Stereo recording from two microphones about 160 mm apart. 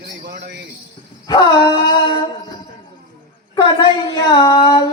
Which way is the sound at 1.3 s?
25° left (ahead or behind).